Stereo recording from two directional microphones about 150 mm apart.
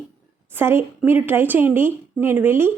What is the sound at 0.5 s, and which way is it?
A woman's voice, 15° right (ahead or behind).